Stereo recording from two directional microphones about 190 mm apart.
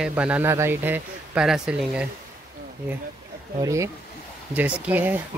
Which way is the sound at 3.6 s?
15° right (ahead or behind).